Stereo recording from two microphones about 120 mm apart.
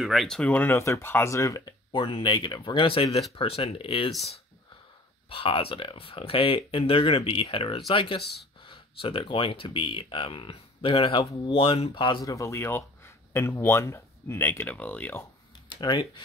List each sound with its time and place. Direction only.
0.0 s speech: centre (ahead or behind)
0.5 s speech: 15° left (ahead or behind)
1.9 s speech: 45° left (ahead or behind)
5.3 s speech: 50° left (ahead or behind)
12.3 s speech: 25° left (ahead or behind)
15.7 s speech: 40° left (ahead or behind)